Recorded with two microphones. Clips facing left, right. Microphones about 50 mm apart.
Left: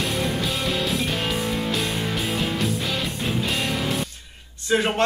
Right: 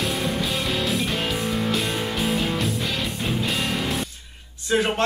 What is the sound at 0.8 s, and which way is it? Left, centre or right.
Music, centre.